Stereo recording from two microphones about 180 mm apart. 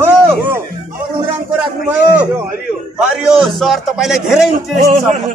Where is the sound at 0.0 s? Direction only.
10° right (ahead or behind).